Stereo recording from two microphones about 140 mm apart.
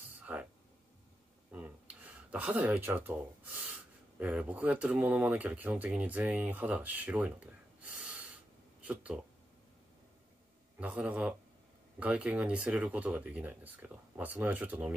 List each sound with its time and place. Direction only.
0.3 s speech: 15° right (ahead or behind)
1.5 s a sound: 10° right (ahead or behind)
2.9 s speech: 10° right (ahead or behind)
10.8 s speech: 10° right (ahead or behind)